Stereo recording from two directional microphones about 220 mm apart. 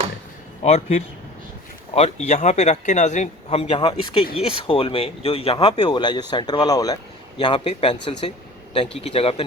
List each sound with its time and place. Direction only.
0.6 s a man's voice: 30° left (ahead or behind)
9.0 s a man's voice: 25° left (ahead or behind)